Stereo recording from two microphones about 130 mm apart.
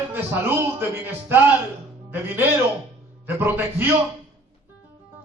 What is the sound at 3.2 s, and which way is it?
Speech, 15° right (ahead or behind).